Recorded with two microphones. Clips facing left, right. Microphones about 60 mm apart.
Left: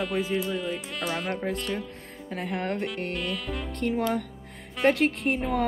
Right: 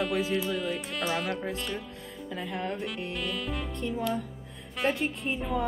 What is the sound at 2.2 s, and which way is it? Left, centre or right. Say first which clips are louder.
Speech: left 3 dB; left.